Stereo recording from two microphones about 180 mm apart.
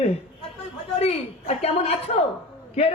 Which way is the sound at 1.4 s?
35° left (ahead or behind).